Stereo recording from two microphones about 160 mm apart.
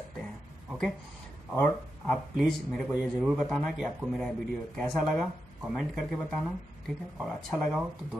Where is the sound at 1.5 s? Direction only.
10° left (ahead or behind).